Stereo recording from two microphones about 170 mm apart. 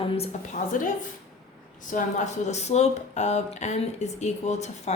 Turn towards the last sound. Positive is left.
turn(degrees=40)  # may be behind; listen again after turning